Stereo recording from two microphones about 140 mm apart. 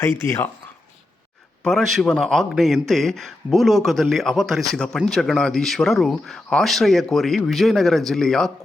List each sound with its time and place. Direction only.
0.0 s speech: 20° left (ahead or behind)
1.6 s speech: centre (ahead or behind)